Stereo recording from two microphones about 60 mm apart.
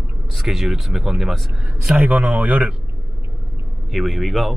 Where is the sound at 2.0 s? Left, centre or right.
Right.